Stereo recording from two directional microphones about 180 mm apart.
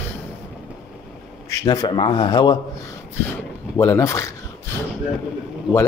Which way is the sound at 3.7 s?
15° left (ahead or behind).